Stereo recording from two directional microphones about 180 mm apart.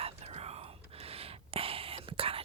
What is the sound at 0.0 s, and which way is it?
Whispering, 35° right (ahead or behind).